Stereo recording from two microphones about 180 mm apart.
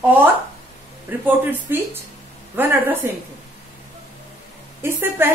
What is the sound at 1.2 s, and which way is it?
A woman's voice, 10° right (ahead or behind).